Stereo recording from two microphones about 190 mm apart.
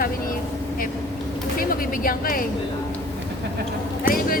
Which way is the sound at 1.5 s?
50° left (ahead or behind).